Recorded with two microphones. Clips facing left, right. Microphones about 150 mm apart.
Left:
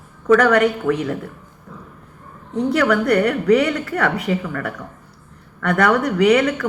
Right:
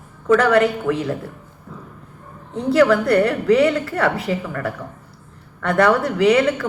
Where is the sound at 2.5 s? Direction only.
30° right (ahead or behind).